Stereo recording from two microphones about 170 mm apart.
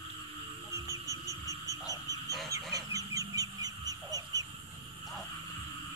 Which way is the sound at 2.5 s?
20° right (ahead or behind).